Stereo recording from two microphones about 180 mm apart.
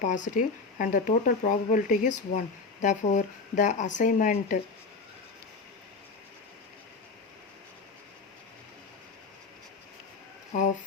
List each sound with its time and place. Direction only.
0.0 s speech: 45° left (ahead or behind)